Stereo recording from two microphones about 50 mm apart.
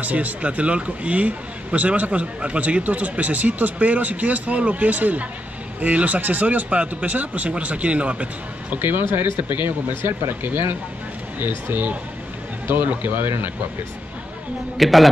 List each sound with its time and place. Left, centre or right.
0.0 s a man's voice: right
8.8 s a man's voice: right
14.8 s a man's voice: centre